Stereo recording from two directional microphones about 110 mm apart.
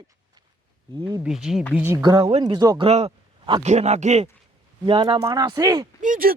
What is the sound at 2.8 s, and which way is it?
Speech, 70° right (ahead or behind).